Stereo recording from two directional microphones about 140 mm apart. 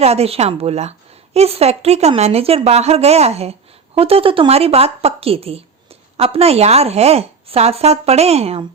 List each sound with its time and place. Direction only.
0.0 s speech: 50° right (ahead or behind)